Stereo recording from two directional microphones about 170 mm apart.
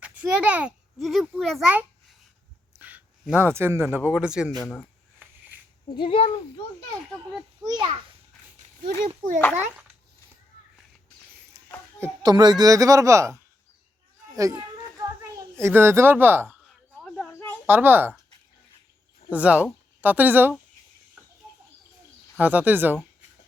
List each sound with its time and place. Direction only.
0.2 s a child's voice: 10° right (ahead or behind)
2.7 s a sound: 10° right (ahead or behind)
3.9 s speech: 5° right (ahead or behind)
5.9 s speech: 30° left (ahead or behind)
7.6 s speech: 25° right (ahead or behind)
9.0 s a child's voice: 50° right (ahead or behind)
12.2 s speech: 25° right (ahead or behind)
14.3 s children playing: 20° right (ahead or behind)
15.6 s a child's voice: 15° right (ahead or behind)
17.0 s a sound: 5° left (ahead or behind)
17.7 s a child's voice: 10° right (ahead or behind)
19.3 s a child's voice: 10° right (ahead or behind)
21.4 s bird: 5° right (ahead or behind)
22.4 s a child's voice: 10° right (ahead or behind)